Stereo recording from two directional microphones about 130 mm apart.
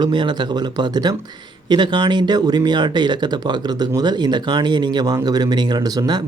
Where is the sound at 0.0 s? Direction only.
35° right (ahead or behind).